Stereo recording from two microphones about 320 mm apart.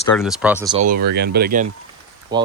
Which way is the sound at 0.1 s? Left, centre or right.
Centre.